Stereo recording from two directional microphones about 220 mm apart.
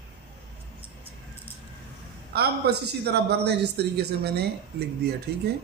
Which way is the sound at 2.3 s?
45° right (ahead or behind).